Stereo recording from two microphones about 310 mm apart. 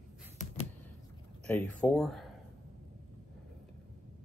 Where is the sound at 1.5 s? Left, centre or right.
Centre.